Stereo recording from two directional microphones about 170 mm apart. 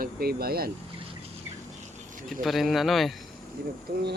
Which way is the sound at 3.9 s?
70° right (ahead or behind).